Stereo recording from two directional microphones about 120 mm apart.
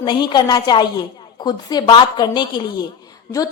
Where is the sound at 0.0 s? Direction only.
40° left (ahead or behind).